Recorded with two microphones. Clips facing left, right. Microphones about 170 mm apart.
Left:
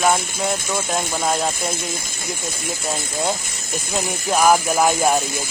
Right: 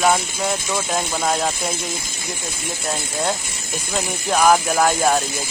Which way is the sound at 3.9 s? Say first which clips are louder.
Even; 5° left (ahead or behind).